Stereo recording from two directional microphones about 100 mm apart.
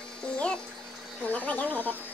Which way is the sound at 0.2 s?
10° left (ahead or behind).